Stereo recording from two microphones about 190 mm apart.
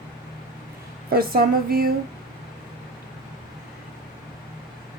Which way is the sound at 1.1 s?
50° right (ahead or behind).